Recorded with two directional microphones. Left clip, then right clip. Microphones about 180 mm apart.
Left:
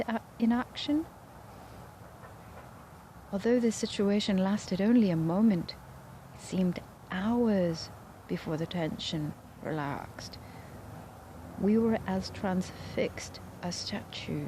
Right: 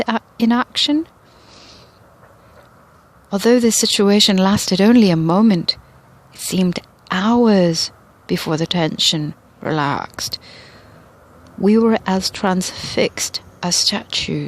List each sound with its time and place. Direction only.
0.0 s a woman's voice: 60° right (ahead or behind)
3.3 s a woman's voice: 60° right (ahead or behind)
11.6 s speech: 60° right (ahead or behind)